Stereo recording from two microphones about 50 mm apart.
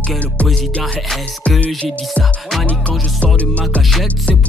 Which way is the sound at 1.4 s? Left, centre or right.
Left.